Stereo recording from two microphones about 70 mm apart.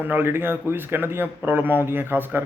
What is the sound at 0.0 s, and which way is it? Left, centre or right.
A man's voice, right.